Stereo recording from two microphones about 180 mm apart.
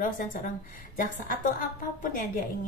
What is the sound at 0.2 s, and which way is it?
A woman's voice, 50° left (ahead or behind).